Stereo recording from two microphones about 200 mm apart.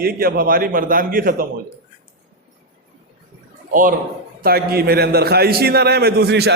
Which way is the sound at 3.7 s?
40° right (ahead or behind).